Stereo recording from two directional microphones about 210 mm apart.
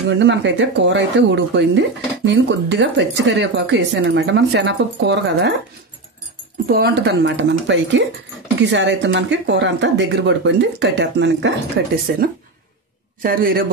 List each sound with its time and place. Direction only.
0.1 s speech: 60° right (ahead or behind)
6.7 s a man's voice: 50° right (ahead or behind)